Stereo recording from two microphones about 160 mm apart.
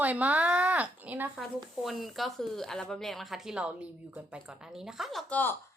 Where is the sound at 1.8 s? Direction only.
Centre (ahead or behind).